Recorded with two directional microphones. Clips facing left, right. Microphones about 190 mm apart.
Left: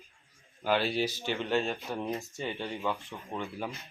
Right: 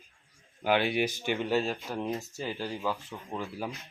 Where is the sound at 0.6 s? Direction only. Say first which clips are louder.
Right 2 dB; 15° right (ahead or behind).